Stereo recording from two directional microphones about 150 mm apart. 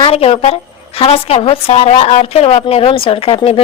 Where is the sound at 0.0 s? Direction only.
40° left (ahead or behind).